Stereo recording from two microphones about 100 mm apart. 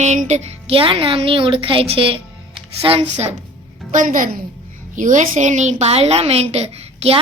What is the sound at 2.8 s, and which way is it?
Speech, 80° right.